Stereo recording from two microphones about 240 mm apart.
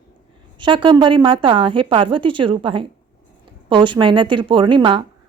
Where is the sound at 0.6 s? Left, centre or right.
Right.